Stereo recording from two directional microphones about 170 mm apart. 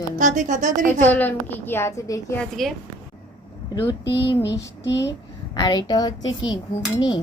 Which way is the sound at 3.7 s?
25° left (ahead or behind).